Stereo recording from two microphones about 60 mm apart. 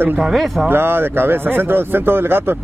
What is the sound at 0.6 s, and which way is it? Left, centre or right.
Speech, right.